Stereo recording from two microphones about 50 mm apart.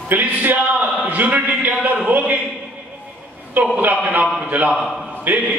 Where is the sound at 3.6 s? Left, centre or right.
Right.